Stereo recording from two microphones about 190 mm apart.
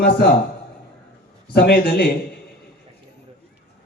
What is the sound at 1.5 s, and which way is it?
Speech, 55° left (ahead or behind).